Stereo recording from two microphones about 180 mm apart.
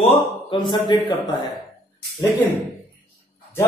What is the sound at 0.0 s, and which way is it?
Speech, 25° left (ahead or behind).